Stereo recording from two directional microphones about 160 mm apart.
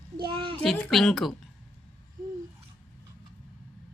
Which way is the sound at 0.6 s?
Centre (ahead or behind).